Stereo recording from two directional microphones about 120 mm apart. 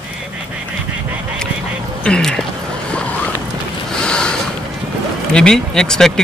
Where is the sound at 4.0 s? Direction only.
5° left (ahead or behind).